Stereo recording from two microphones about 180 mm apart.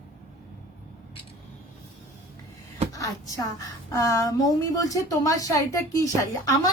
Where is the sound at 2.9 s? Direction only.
20° left (ahead or behind).